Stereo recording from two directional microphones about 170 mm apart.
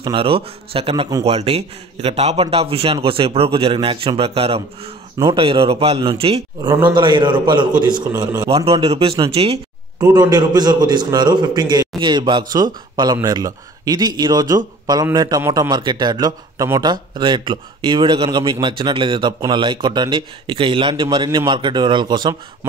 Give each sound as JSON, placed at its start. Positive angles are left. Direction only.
{"t": 0.0, "sound": "a man's voice", "side_deg": -30}
{"t": 9.9, "sound": "a man's voice", "side_deg": -25}